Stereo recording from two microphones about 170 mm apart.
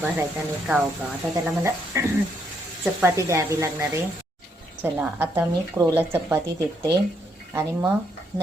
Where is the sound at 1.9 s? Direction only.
20° right (ahead or behind).